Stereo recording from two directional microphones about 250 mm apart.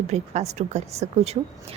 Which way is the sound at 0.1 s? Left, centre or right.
Right.